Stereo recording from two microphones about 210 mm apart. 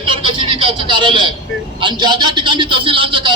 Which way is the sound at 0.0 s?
25° right (ahead or behind).